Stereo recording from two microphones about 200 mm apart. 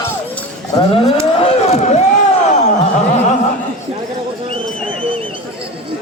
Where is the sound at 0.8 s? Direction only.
30° left (ahead or behind).